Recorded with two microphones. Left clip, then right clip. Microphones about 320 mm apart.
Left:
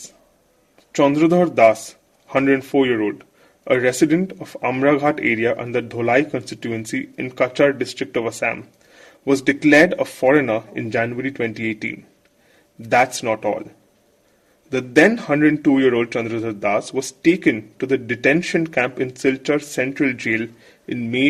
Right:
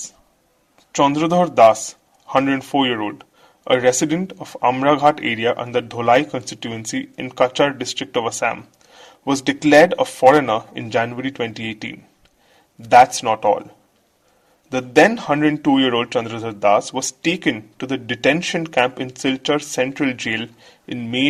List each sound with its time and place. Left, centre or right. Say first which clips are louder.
1.1 s speech: even; right
13.2 s speech: right 4 dB; right
14.7 s speech: right 1 dB; right